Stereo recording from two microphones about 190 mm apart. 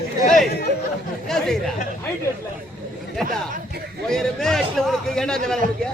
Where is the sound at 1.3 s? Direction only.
Centre (ahead or behind).